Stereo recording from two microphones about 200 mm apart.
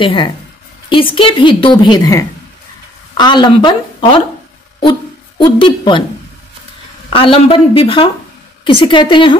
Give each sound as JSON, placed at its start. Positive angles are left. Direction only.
{"t": 0.0, "sound": "a woman's voice", "side_deg": 25}
{"t": 5.4, "sound": "a woman's voice", "side_deg": 25}
{"t": 7.1, "sound": "a woman's voice", "side_deg": 30}